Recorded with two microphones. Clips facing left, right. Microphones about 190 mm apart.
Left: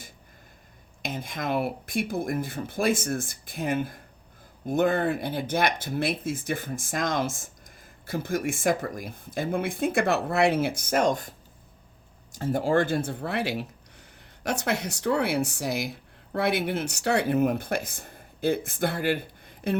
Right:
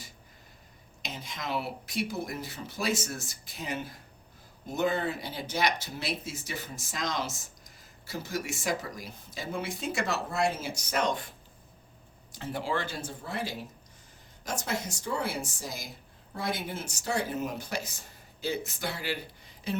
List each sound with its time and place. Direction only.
1.0 s speech: 55° left (ahead or behind)
12.4 s a woman's voice: 45° left (ahead or behind)